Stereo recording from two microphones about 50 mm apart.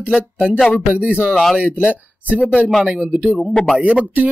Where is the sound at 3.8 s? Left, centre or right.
Right.